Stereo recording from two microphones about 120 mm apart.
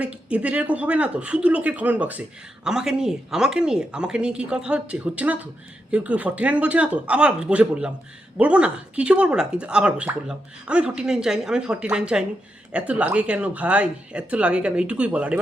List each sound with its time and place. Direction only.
0.0 s speech: 10° right (ahead or behind)